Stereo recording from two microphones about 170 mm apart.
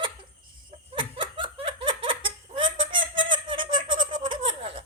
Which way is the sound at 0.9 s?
30° right (ahead or behind).